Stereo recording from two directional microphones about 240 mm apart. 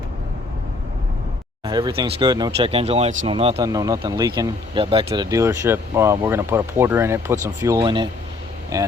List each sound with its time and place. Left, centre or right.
1.6 s speech: centre